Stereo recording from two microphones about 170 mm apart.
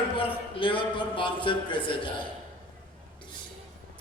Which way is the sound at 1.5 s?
30° left (ahead or behind).